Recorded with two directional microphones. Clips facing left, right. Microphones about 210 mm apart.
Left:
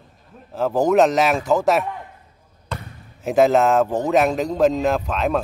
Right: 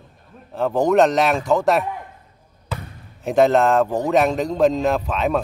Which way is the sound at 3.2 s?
Centre (ahead or behind).